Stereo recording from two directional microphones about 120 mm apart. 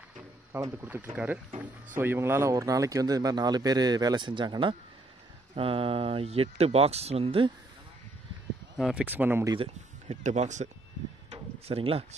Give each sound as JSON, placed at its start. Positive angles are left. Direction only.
{"t": 0.5, "sound": "speech", "side_deg": -25}
{"t": 8.7, "sound": "speech", "side_deg": 0}
{"t": 9.0, "sound": "speech", "side_deg": -15}
{"t": 10.2, "sound": "speech", "side_deg": -75}
{"t": 11.2, "sound": "a sound", "side_deg": -55}